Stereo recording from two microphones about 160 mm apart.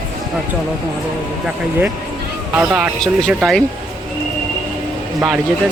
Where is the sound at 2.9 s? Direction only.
Centre (ahead or behind).